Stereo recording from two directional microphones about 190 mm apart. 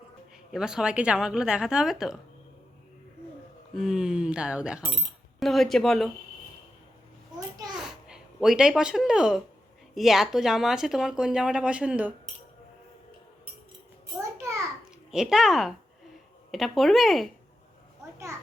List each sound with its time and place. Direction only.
0.5 s speech: 5° right (ahead or behind)
3.8 s speech: centre (ahead or behind)
7.8 s babbling: 5° right (ahead or behind)
9.9 s speech: centre (ahead or behind)
14.2 s a sound: 15° right (ahead or behind)
15.1 s speech: 5° right (ahead or behind)